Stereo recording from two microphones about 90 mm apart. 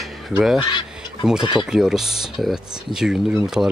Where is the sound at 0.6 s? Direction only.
60° left (ahead or behind).